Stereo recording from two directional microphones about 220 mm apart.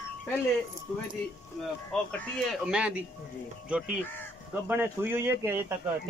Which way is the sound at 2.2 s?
Centre (ahead or behind).